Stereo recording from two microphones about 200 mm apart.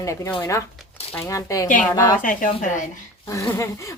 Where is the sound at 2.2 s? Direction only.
40° left (ahead or behind).